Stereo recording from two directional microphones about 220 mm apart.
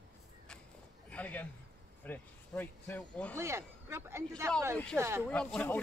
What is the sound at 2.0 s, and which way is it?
Speech, 10° left (ahead or behind).